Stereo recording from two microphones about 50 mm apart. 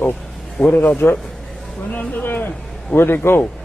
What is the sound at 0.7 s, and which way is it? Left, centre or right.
A man's voice, left.